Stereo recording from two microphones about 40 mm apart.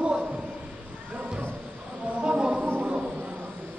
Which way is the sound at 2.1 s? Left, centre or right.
Right.